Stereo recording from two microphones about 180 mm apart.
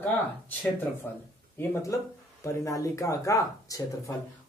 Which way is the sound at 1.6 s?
15° left (ahead or behind).